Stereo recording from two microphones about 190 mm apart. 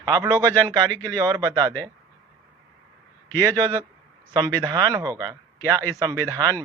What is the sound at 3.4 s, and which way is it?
Speech, 20° right (ahead or behind).